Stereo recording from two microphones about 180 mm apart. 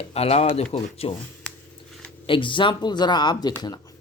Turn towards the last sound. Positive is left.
turn(degrees=25)  # may be behind; listen again after turning